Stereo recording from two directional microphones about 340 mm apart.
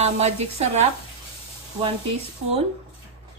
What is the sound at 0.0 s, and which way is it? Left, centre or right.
Speech, centre.